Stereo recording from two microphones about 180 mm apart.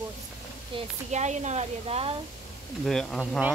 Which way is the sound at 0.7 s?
40° right (ahead or behind).